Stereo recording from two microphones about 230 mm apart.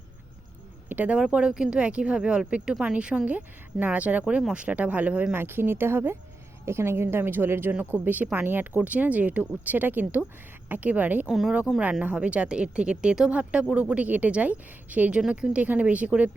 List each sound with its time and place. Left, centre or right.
0.9 s a woman's voice: centre